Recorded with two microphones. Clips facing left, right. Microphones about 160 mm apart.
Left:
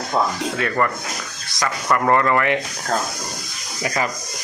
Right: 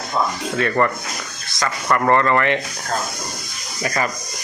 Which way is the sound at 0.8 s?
5° left (ahead or behind).